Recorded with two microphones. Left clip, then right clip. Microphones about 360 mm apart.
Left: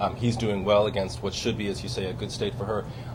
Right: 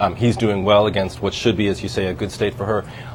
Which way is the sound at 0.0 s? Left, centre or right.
Right.